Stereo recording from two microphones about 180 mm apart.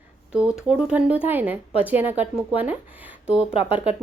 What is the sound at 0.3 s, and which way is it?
A woman's voice, 5° right (ahead or behind).